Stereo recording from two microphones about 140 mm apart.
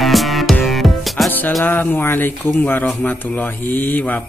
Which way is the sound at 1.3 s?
10° left (ahead or behind).